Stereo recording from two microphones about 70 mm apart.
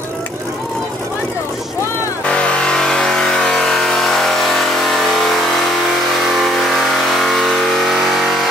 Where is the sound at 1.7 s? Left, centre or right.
Left.